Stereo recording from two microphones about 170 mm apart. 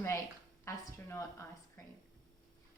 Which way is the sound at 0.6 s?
15° left (ahead or behind).